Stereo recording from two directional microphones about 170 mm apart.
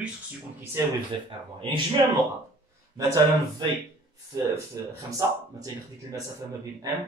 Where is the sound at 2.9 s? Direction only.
20° right (ahead or behind).